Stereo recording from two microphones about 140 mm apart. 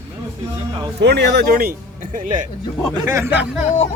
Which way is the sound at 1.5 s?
90° right.